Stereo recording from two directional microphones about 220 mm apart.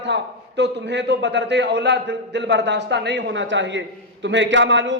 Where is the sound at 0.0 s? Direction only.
50° right (ahead or behind).